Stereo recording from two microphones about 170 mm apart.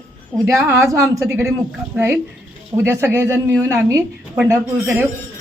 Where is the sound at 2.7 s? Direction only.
15° right (ahead or behind).